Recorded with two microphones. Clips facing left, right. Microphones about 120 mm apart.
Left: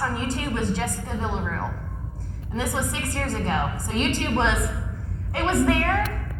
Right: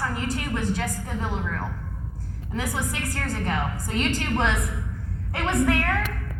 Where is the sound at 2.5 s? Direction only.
25° left (ahead or behind).